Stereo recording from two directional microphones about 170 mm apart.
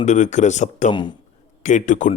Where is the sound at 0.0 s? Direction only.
45° left (ahead or behind).